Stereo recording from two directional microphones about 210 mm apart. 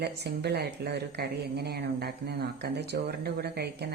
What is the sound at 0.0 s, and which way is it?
Speech, 50° right (ahead or behind).